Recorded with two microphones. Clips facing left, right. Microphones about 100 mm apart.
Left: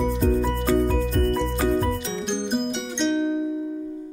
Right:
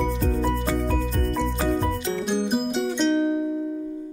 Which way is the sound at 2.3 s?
5° right (ahead or behind).